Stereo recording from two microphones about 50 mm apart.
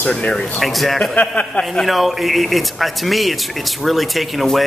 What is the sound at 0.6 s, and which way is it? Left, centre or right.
Speech, centre.